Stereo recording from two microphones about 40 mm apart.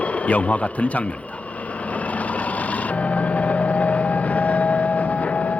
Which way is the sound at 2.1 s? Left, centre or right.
Left.